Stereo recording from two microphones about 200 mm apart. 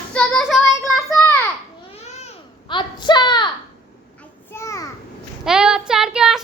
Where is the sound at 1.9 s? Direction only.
30° left (ahead or behind).